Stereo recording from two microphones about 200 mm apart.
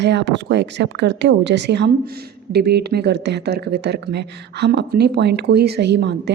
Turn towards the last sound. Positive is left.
turn(degrees=-55)  # may be behind; listen again after turning